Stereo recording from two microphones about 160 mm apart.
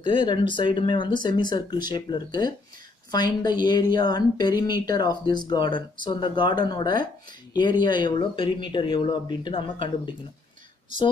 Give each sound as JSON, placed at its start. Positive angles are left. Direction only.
{"t": 0.0, "sound": "speech", "side_deg": 30}